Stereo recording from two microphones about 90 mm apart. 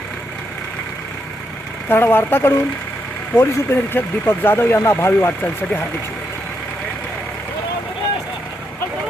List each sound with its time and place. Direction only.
1.9 s speech: 25° left (ahead or behind)